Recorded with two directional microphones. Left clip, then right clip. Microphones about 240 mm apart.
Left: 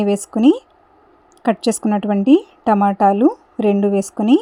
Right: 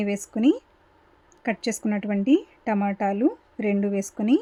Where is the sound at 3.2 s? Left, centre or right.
Centre.